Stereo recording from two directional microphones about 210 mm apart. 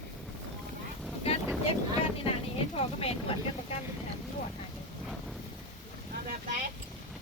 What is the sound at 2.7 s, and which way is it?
Speech, 25° left (ahead or behind).